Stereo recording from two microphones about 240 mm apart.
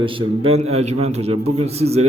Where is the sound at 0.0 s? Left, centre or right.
Right.